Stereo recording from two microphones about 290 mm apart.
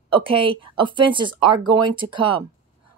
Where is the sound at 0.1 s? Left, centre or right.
Centre.